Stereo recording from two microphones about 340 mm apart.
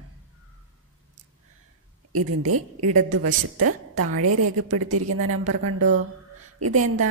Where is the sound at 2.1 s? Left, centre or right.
Right.